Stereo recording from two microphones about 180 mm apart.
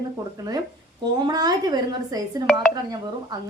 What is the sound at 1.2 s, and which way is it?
A woman's voice, 20° right (ahead or behind).